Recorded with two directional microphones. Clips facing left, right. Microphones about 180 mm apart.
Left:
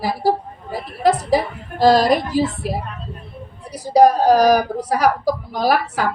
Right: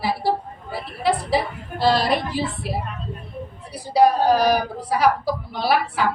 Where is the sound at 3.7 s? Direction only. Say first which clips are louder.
Left 4 dB; 45° left (ahead or behind).